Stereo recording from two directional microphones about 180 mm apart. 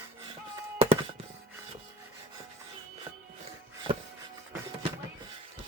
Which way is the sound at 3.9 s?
30° right (ahead or behind).